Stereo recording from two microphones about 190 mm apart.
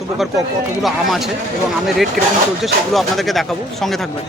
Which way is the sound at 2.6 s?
Centre (ahead or behind).